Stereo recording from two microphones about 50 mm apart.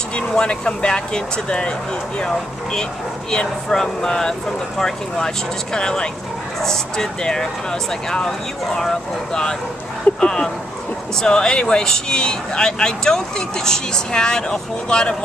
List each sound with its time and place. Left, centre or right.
0.3 s speech: centre